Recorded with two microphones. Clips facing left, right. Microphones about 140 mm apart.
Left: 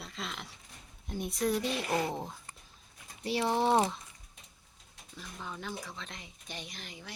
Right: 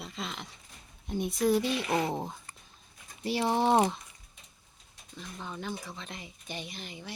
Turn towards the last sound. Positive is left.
turn(degrees=0)  # may be behind; listen again after turning